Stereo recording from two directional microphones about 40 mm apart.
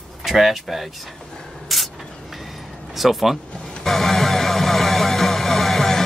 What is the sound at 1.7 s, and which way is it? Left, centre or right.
Spray, centre.